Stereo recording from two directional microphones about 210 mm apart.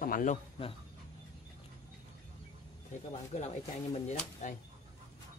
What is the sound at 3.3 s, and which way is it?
A man's voice, 30° left (ahead or behind).